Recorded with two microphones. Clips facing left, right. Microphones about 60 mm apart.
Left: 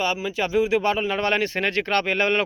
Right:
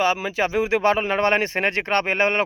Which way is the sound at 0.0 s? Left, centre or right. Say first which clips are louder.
Right 3 dB; right.